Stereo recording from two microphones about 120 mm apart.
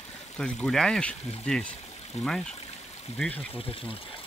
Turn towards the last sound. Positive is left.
turn(degrees=50)  # may be behind; listen again after turning